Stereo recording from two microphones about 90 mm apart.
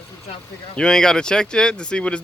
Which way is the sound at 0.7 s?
10° left (ahead or behind).